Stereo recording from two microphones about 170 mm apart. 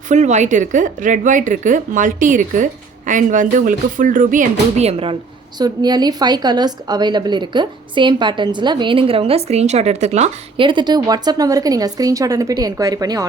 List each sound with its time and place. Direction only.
0.1 s a woman's voice: 45° right (ahead or behind)
5.5 s a woman's voice: 25° right (ahead or behind)